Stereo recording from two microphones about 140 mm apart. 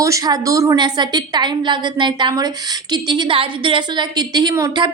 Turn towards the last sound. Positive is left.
turn(degrees=-25)  # may be behind; listen again after turning